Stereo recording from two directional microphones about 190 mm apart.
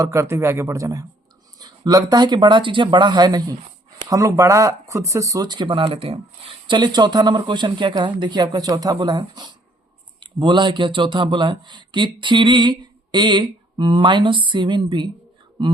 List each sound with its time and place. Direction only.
0.0 s speech: 15° right (ahead or behind)